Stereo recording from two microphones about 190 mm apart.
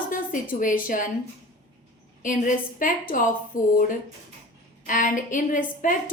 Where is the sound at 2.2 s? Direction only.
45° left (ahead or behind).